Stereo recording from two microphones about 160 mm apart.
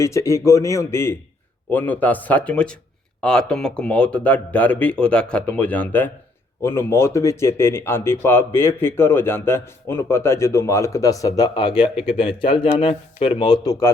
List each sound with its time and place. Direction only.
0.0 s speech: 20° left (ahead or behind)